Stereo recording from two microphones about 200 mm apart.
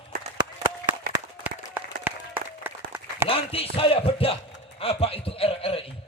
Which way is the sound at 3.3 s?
30° left (ahead or behind).